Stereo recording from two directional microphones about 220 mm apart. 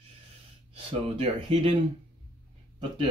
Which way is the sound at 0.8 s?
25° right (ahead or behind).